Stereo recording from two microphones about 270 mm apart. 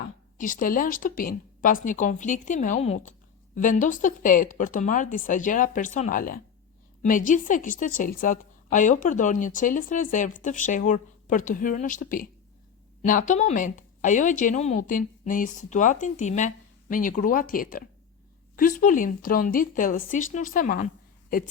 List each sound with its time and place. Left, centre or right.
0.3 s a woman's voice: left